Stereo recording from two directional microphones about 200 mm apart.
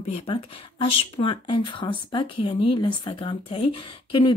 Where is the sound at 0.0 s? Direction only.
30° left (ahead or behind).